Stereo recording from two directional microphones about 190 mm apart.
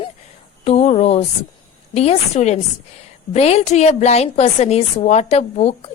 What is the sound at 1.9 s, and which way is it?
A woman's voice, 35° left (ahead or behind).